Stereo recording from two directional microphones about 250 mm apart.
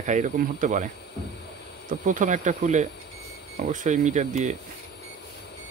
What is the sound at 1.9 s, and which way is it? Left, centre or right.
Speech, right.